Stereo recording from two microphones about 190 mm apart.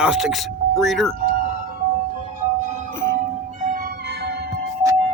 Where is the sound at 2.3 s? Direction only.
40° right (ahead or behind); by 4.5 s 60° right (ahead or behind).